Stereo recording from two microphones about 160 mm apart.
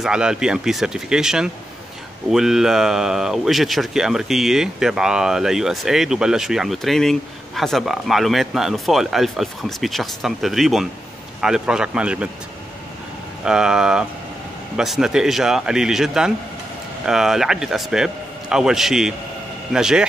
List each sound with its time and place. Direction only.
0.0 s speech: 5° right (ahead or behind)
13.5 s speech: 5° right (ahead or behind)